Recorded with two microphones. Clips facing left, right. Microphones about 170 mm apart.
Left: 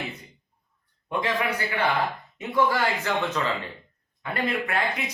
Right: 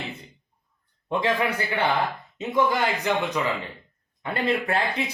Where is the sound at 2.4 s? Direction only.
20° right (ahead or behind).